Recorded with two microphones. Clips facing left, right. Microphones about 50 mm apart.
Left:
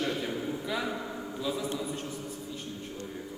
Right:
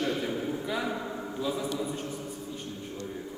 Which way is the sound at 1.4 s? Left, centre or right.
Right.